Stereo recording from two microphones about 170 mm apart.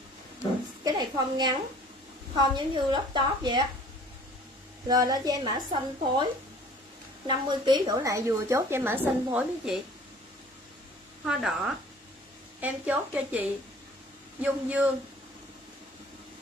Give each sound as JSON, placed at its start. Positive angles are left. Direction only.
{"t": 0.8, "sound": "a woman's voice", "side_deg": -25}
{"t": 4.8, "sound": "a woman's voice", "side_deg": -20}
{"t": 7.2, "sound": "a woman's voice", "side_deg": -25}
{"t": 11.2, "sound": "a woman's voice", "side_deg": 0}